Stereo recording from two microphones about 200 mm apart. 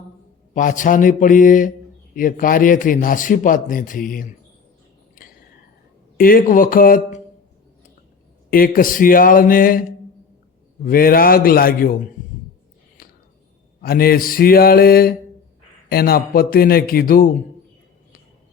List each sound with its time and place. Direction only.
0.5 s a man's voice: 40° left (ahead or behind)
6.1 s a man's voice: 45° left (ahead or behind)
8.4 s a man's voice: 45° left (ahead or behind)
10.8 s a man's voice: 45° left (ahead or behind)
13.0 s a sound: 45° left (ahead or behind)
13.8 s a man's voice: 50° left (ahead or behind)